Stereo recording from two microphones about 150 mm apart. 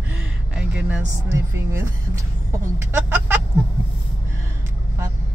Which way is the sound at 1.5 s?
15° right (ahead or behind).